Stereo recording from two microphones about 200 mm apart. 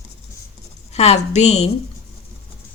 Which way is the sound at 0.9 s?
35° left (ahead or behind).